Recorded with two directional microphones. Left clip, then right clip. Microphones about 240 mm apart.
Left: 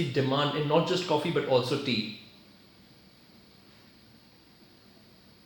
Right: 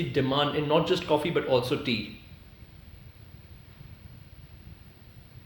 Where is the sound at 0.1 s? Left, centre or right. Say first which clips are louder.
Right 3 dB; right.